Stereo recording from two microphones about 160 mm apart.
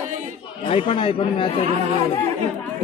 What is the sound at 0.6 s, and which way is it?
Speech, 35° left (ahead or behind).